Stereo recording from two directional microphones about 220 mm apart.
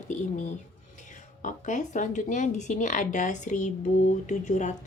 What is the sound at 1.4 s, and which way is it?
A woman's voice, 35° left (ahead or behind).